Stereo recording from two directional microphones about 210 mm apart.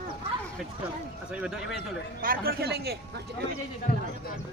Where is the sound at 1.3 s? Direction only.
Centre (ahead or behind).